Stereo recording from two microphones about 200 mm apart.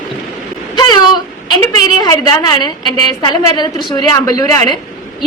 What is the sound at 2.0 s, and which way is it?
A woman's voice, 20° left (ahead or behind).